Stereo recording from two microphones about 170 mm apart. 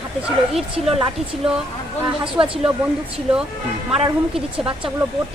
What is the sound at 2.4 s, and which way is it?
Speech, 25° right (ahead or behind).